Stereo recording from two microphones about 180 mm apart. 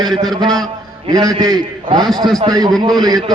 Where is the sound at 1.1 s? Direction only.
20° right (ahead or behind).